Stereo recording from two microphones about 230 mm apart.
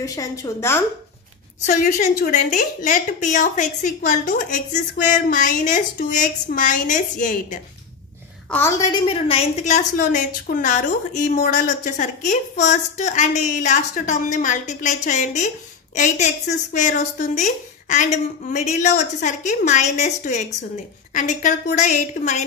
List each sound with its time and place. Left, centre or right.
0.0 s a woman's voice: centre
1.7 s a woman's voice: left
8.5 s a woman's voice: centre; by 22.4 s left